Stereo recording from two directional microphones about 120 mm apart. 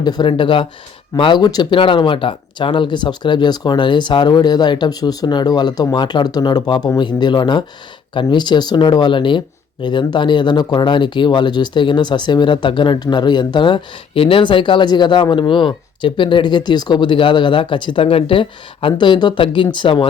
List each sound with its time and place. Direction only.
0.0 s speech: 35° left (ahead or behind)